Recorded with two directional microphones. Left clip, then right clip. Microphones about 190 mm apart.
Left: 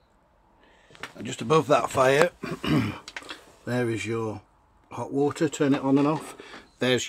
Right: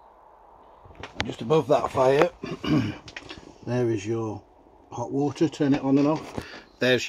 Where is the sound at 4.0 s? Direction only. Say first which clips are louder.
Even; 65° left (ahead or behind).